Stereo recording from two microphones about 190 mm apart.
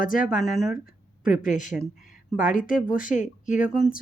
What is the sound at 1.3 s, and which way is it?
Speech, 40° left (ahead or behind).